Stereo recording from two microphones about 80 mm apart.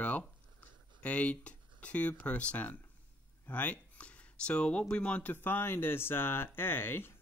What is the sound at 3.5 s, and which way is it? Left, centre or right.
Speech, centre.